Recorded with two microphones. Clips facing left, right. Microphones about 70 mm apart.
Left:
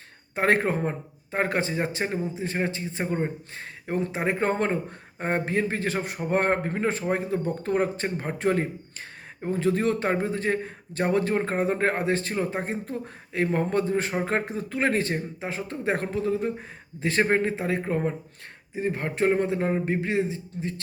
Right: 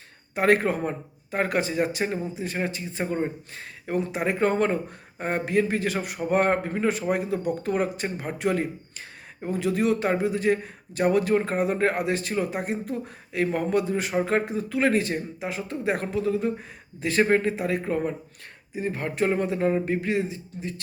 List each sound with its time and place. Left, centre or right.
0.3 s a man's voice: left